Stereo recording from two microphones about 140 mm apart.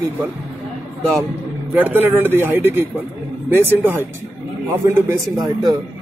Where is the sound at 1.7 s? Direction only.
15° right (ahead or behind).